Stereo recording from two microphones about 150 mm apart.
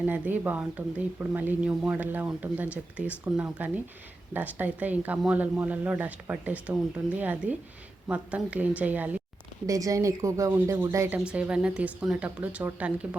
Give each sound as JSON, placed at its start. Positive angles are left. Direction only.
{"t": 0.0, "sound": "speech", "side_deg": -10}
{"t": 9.6, "sound": "speech", "side_deg": -20}
{"t": 11.2, "sound": "speech", "side_deg": -5}